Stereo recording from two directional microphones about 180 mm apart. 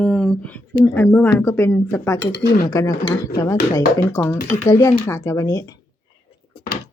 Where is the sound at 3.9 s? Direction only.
15° left (ahead or behind).